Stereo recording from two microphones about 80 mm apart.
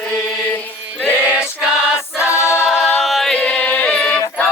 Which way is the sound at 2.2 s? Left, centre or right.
Left.